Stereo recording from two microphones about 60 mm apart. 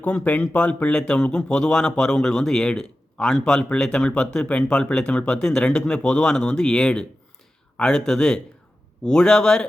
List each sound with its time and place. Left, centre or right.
0.0 s speech: left